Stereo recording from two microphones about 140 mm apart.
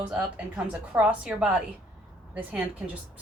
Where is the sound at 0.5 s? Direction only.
10° right (ahead or behind).